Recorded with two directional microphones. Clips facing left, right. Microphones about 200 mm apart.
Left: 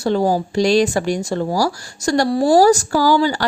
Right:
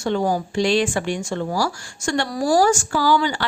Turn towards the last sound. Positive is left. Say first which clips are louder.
# left 4 dB
turn(degrees=40)  # may be behind; listen again after turning